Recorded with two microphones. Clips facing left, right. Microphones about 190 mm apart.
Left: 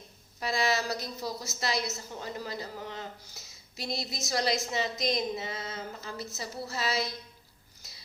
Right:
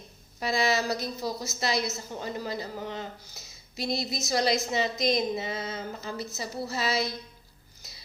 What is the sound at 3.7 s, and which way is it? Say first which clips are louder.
Speech: right 5 dB; 75° right (ahead or behind).